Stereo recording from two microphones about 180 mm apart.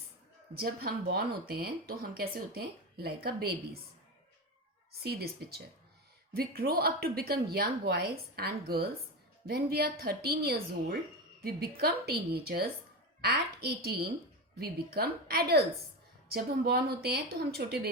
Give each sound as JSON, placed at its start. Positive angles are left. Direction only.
{"t": 0.5, "sound": "speech", "side_deg": -60}
{"t": 5.0, "sound": "speech", "side_deg": -60}